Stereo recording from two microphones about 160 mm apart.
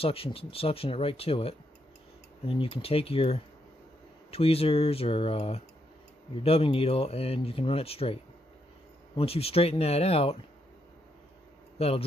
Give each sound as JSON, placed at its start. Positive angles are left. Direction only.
{"t": 0.0, "sound": "speech", "side_deg": 35}
{"t": 11.8, "sound": "speech", "side_deg": 40}